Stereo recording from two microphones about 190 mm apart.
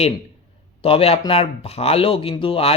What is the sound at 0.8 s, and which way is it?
Speech, 30° left (ahead or behind).